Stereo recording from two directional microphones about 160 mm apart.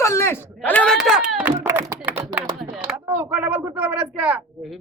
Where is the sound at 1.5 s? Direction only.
15° right (ahead or behind).